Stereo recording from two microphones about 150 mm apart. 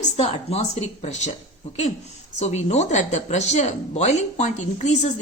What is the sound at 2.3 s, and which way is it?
Speech, 50° left (ahead or behind).